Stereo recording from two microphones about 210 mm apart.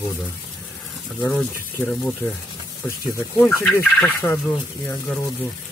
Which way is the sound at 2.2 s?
10° left (ahead or behind).